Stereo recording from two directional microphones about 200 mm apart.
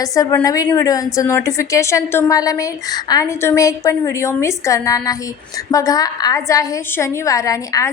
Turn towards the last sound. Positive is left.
turn(degrees=15)  # may be behind; listen again after turning